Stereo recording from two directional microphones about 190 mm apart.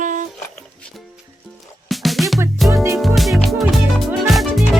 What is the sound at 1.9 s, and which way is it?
Music, centre (ahead or behind).